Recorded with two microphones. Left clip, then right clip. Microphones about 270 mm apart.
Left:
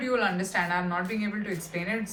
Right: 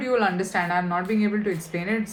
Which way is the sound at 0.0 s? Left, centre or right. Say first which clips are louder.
Right 4 dB; right.